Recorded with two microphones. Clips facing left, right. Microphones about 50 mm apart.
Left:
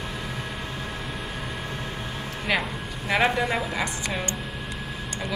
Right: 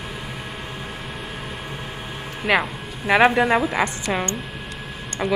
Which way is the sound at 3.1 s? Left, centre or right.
Right.